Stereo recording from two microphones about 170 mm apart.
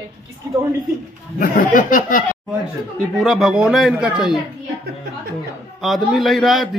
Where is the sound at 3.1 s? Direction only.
Centre (ahead or behind).